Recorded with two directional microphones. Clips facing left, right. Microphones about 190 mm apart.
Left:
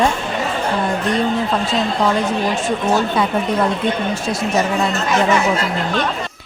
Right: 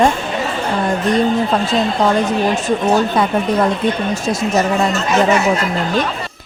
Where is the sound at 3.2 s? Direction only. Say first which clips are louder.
Right 2 dB; 45° right (ahead or behind).